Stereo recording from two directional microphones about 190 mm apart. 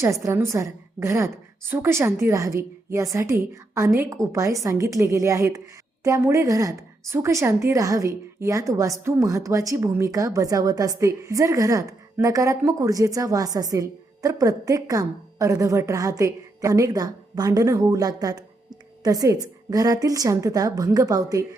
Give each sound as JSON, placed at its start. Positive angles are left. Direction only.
{"t": 0.0, "sound": "a woman's voice", "side_deg": -15}